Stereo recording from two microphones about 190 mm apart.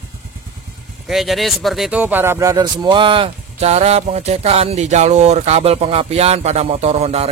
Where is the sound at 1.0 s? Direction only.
Centre (ahead or behind).